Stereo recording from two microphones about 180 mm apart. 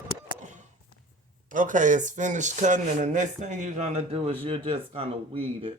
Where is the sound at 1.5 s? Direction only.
45° right (ahead or behind).